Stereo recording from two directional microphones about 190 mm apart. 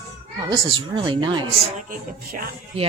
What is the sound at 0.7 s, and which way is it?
Speech, 25° right (ahead or behind).